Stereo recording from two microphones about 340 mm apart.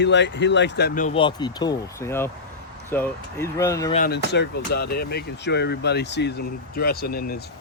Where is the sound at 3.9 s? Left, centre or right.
Left.